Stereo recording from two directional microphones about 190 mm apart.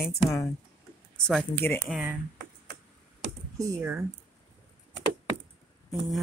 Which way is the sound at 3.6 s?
15° right (ahead or behind).